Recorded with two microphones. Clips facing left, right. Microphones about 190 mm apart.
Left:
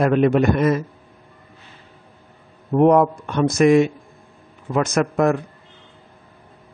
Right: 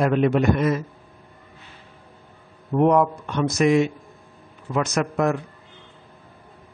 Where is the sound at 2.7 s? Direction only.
45° left (ahead or behind).